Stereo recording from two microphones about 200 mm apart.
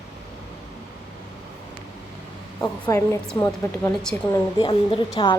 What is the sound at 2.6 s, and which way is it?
A woman's voice, 10° left (ahead or behind).